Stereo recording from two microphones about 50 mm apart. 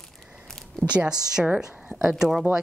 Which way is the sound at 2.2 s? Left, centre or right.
Centre.